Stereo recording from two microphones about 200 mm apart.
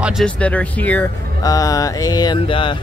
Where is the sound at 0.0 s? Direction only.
Centre (ahead or behind).